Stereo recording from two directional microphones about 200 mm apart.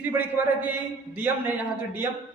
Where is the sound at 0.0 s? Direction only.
10° right (ahead or behind).